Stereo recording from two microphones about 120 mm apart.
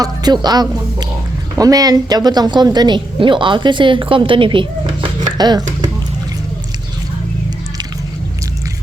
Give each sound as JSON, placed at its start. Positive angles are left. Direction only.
{"t": 0.0, "sound": "a woman's voice", "side_deg": -35}